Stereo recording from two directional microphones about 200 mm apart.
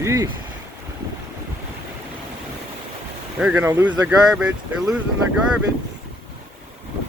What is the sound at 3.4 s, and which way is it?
Speech, 10° right (ahead or behind).